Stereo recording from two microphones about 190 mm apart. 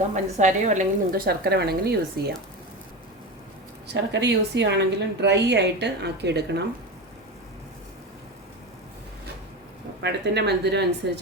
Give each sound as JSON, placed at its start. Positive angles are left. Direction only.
{"t": 0.1, "sound": "a woman's voice", "side_deg": -40}
{"t": 3.8, "sound": "a woman's voice", "side_deg": -65}
{"t": 10.0, "sound": "a woman's voice", "side_deg": -65}